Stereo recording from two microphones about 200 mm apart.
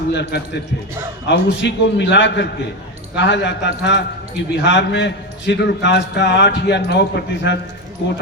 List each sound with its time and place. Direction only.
0.1 s a man's voice: 55° left (ahead or behind)